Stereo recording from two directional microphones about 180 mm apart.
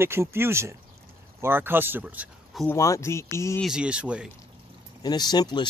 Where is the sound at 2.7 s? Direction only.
15° left (ahead or behind).